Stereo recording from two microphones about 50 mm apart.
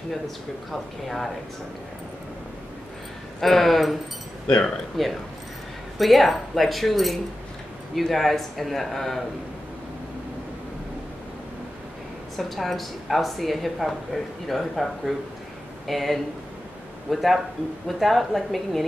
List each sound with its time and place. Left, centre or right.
1.0 s a woman's voice: centre
3.3 s a woman's voice: centre
12.4 s a woman's voice: centre